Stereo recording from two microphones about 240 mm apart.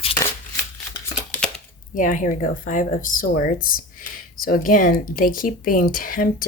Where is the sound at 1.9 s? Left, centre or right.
Left.